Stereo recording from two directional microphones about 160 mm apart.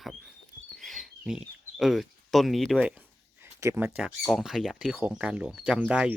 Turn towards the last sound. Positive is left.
turn(degrees=-5)  # may be behind; listen again after turning